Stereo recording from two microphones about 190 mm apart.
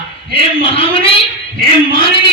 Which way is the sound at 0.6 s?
30° left (ahead or behind).